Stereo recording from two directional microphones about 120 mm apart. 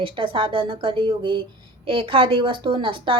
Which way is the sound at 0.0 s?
45° right (ahead or behind).